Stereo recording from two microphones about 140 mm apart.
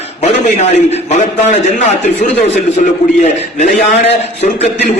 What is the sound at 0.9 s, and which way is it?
A man's voice, 55° left (ahead or behind).